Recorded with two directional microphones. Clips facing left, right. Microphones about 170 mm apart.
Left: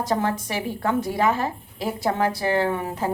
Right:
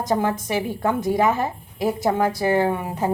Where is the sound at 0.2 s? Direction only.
15° right (ahead or behind).